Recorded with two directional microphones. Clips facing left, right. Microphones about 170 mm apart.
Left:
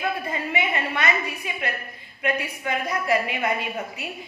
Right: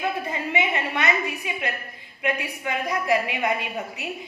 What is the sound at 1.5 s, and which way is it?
A woman's voice, 15° right (ahead or behind).